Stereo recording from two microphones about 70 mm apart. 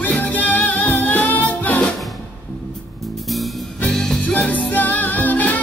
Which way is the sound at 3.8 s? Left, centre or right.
Centre.